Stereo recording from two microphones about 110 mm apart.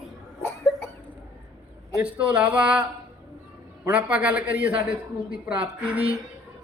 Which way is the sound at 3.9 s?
10° right (ahead or behind).